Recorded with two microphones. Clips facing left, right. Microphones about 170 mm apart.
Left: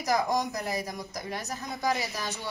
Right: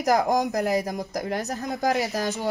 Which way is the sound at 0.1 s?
55° right (ahead or behind).